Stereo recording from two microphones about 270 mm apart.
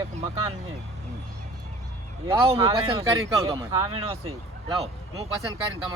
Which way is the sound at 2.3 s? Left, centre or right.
Centre.